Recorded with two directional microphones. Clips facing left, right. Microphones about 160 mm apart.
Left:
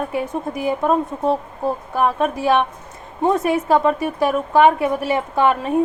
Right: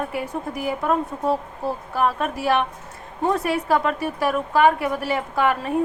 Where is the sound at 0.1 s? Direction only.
20° left (ahead or behind).